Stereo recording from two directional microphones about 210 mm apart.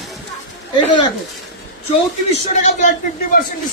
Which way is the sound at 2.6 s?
35° left (ahead or behind).